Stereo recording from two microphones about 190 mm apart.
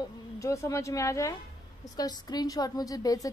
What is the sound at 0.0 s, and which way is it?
A woman's voice, 15° left (ahead or behind).